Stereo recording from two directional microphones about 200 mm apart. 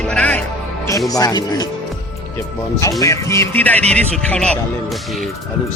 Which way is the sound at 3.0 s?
15° left (ahead or behind).